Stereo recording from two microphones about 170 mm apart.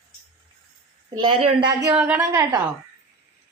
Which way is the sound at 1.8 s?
15° right (ahead or behind).